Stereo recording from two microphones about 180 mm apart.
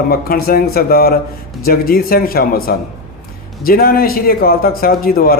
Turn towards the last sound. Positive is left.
turn(degrees=55)  # may be behind; listen again after turning